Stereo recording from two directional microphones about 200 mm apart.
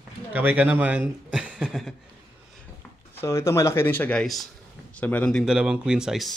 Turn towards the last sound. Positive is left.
turn(degrees=0)  # may be behind; listen again after turning